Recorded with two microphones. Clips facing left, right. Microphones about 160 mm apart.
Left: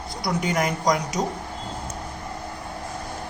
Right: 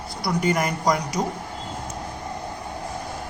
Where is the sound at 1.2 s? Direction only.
20° left (ahead or behind).